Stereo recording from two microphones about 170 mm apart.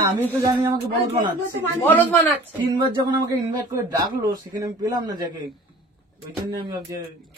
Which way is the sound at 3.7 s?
20° right (ahead or behind).